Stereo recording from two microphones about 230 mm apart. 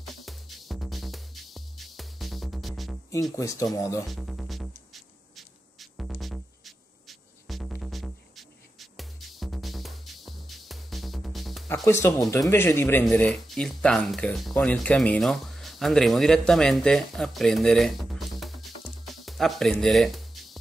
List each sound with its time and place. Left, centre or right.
0.0 s music: centre
3.3 s speech: centre
4.1 s music: centre
11.7 s speech: centre